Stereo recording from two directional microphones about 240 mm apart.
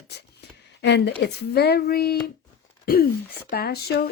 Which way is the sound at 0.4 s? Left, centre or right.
Left.